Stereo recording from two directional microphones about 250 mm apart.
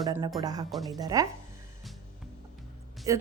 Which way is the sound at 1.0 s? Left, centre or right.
Centre.